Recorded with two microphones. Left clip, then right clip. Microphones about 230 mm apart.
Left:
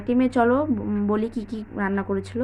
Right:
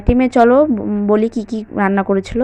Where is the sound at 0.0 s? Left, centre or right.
Right.